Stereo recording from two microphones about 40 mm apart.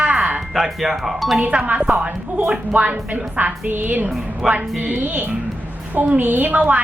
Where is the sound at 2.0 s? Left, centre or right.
Right.